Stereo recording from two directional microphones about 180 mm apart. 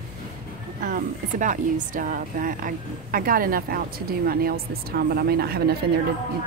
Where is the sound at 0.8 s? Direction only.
50° right (ahead or behind).